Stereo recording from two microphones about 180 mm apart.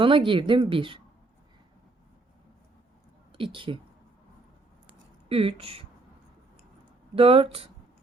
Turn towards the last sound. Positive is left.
turn(degrees=-30)  # may be behind; listen again after turning